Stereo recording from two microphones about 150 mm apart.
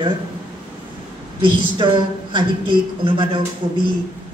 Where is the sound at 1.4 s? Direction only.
30° right (ahead or behind).